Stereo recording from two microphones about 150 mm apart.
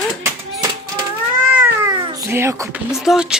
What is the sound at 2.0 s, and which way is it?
Speech, 25° right (ahead or behind).